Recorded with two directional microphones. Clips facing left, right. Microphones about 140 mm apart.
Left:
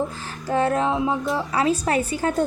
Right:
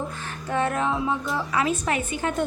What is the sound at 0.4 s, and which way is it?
A woman's voice, 30° left (ahead or behind).